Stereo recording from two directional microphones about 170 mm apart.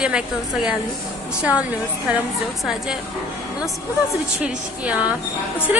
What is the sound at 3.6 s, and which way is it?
Speech, 20° left (ahead or behind).